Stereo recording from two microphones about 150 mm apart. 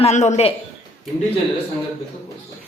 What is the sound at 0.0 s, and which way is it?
Speech, 50° left (ahead or behind).